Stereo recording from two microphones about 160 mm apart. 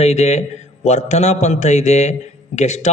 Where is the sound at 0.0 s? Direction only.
45° left (ahead or behind).